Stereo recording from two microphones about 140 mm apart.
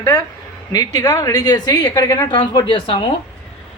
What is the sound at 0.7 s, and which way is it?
A woman's voice, 30° left (ahead or behind).